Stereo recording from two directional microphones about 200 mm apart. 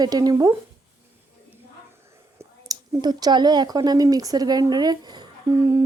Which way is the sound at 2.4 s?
15° right (ahead or behind).